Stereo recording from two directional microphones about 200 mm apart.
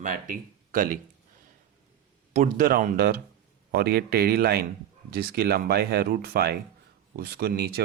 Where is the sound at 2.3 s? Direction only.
40° right (ahead or behind).